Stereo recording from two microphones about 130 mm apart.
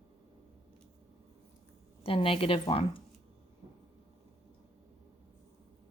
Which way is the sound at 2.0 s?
45° left (ahead or behind).